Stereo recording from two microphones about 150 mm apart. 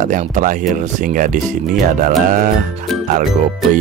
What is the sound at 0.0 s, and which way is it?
Speech, 55° right (ahead or behind).